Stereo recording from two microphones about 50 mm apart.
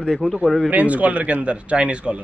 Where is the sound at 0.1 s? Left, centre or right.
Centre.